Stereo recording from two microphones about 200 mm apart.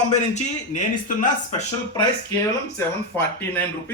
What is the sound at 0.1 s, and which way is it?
Speech, 35° left (ahead or behind).